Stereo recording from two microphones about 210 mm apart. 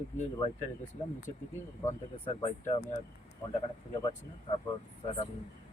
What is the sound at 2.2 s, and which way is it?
Speech, 25° left (ahead or behind).